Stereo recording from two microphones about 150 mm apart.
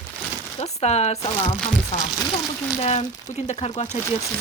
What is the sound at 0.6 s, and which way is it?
Speech, 45° left (ahead or behind).